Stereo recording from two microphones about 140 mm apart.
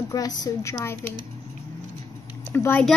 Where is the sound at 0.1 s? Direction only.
25° left (ahead or behind).